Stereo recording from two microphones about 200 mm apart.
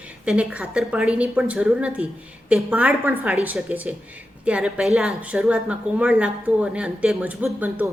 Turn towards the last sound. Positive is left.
turn(degrees=-10)  # may be behind; listen again after turning